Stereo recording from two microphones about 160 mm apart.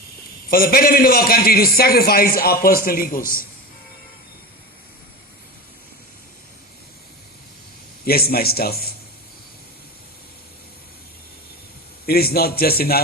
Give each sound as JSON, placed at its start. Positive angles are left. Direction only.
{"t": 0.5, "sound": "a man's voice", "side_deg": 65}
{"t": 8.0, "sound": "a man's voice", "side_deg": 70}
{"t": 12.0, "sound": "a man's voice", "side_deg": 75}